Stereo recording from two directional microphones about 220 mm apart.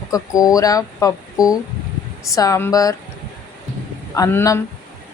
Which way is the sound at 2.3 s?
15° left (ahead or behind).